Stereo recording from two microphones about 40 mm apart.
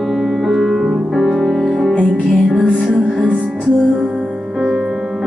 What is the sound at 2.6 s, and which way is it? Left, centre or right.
Music, centre.